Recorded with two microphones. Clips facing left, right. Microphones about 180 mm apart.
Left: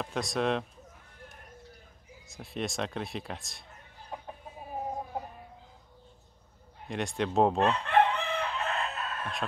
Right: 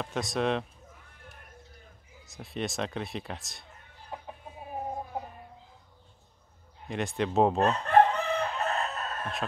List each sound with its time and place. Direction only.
0.0 s speech: centre (ahead or behind)
2.2 s speech: centre (ahead or behind)
4.1 s chicken: 5° right (ahead or behind)
6.9 s speech: centre (ahead or behind)
7.5 s chicken: 40° right (ahead or behind)